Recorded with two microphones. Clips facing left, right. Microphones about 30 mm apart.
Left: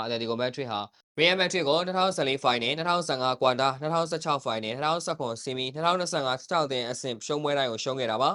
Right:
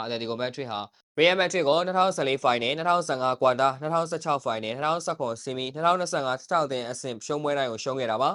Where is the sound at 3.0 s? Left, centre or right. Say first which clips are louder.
Right 2 dB; left.